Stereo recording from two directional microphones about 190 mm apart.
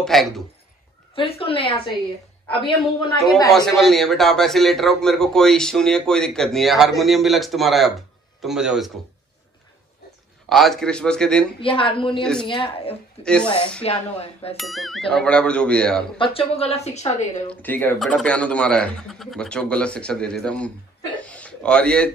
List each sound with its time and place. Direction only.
0.0 s a man's voice: centre (ahead or behind)
1.1 s a woman's voice: 30° left (ahead or behind)
3.5 s a man's voice: centre (ahead or behind)
10.5 s a man's voice: centre (ahead or behind)
11.6 s a woman's voice: 30° left (ahead or behind)
12.2 s a man's voice: 5° left (ahead or behind)
12.4 s a woman's voice: 25° left (ahead or behind)
13.2 s a man's voice: 5° left (ahead or behind)
13.8 s a woman's voice: 30° left (ahead or behind)
14.6 s a man's voice: centre (ahead or behind)
16.2 s a woman's voice: 30° left (ahead or behind)
17.5 s a man's voice: 10° left (ahead or behind)